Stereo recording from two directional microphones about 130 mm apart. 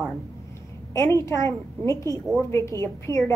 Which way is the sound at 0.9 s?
25° left (ahead or behind).